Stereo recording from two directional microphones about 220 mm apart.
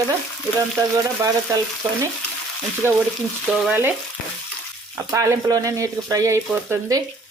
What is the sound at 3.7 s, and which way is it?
Frying, 10° right (ahead or behind).